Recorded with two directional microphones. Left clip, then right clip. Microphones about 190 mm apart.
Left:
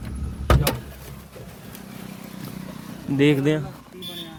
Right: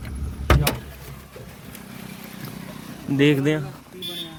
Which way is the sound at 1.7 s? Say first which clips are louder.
Right 1 dB; 60° left (ahead or behind).